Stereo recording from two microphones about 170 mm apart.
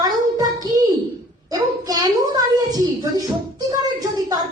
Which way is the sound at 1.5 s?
25° right (ahead or behind).